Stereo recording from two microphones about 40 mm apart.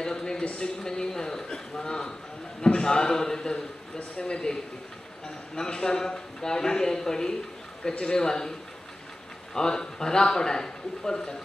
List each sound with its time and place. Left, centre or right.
0.0 s a sound: centre
0.6 s a man's voice: centre
5.6 s a man's voice: centre